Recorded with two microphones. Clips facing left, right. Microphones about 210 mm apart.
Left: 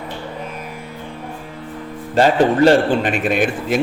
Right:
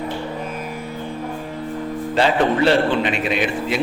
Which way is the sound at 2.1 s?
45° left (ahead or behind).